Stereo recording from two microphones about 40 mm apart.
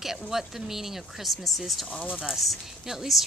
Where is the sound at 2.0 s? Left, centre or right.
Centre.